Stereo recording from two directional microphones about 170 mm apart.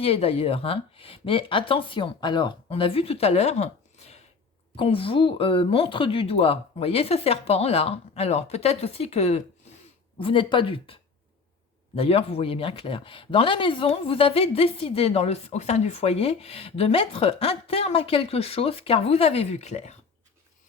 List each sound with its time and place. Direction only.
0.0 s speech: 35° left (ahead or behind)
11.9 s speech: 35° left (ahead or behind)